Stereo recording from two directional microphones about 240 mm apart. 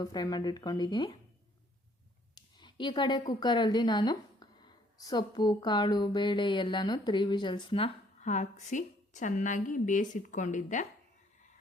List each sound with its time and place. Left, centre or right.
0.0 s speech: centre
2.3 s a woman's voice: centre